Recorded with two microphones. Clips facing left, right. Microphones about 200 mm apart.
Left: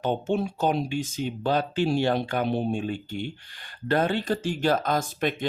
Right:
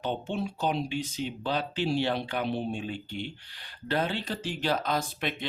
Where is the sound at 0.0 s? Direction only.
45° left (ahead or behind).